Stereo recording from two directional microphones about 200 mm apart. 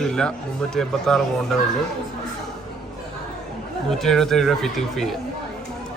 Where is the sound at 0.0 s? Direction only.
5° left (ahead or behind).